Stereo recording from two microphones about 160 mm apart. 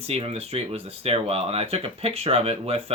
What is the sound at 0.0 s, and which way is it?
Speech, 40° right (ahead or behind).